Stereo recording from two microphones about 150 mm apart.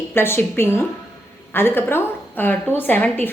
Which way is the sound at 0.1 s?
15° left (ahead or behind).